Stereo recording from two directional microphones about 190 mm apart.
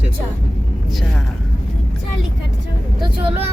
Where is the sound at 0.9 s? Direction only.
Centre (ahead or behind).